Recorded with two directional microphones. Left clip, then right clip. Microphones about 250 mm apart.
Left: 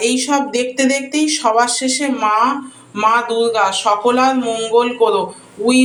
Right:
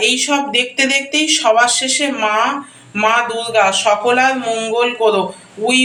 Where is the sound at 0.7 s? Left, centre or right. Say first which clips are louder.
Right 2 dB; left.